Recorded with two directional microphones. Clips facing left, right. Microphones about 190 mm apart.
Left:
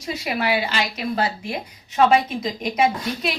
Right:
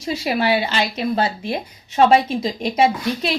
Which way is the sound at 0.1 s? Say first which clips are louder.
Right 4 dB; 30° right (ahead or behind).